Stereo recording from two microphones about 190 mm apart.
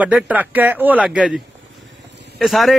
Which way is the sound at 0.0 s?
10° right (ahead or behind).